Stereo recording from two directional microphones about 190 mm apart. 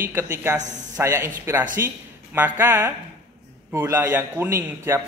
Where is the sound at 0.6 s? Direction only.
40° right (ahead or behind).